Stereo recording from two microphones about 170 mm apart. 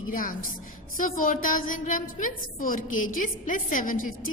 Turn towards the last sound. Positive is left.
turn(degrees=55)  # may be behind; listen again after turning